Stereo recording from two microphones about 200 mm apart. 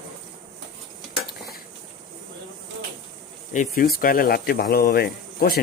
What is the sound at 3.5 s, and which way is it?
Speech, 40° left (ahead or behind).